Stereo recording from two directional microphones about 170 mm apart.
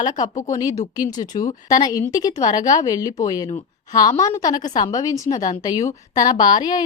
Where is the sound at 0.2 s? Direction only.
45° left (ahead or behind).